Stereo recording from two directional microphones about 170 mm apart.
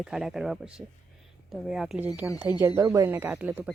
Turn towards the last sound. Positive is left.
turn(degrees=-10)  # may be behind; listen again after turning